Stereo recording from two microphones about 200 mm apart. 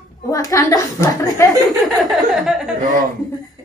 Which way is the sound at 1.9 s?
Centre (ahead or behind).